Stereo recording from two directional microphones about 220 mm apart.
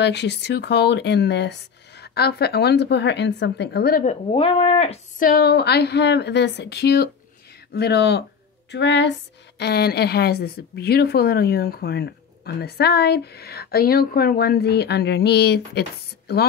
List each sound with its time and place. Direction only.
0.0 s a woman's voice: 50° left (ahead or behind); by 5.3 s 30° left (ahead or behind)
5.3 s a woman's voice: 45° left (ahead or behind)